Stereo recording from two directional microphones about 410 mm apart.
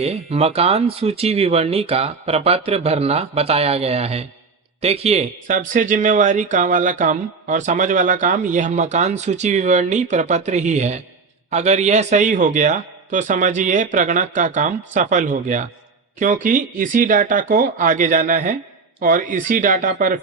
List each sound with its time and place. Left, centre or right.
0.0 s speech: centre